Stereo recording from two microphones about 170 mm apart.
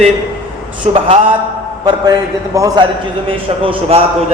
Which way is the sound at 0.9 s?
35° right (ahead or behind).